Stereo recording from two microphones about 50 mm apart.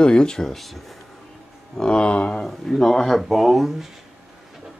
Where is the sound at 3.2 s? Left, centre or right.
Centre.